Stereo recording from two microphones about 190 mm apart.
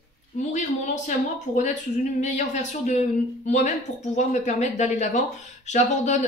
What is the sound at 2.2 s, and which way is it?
Speech, 40° left (ahead or behind).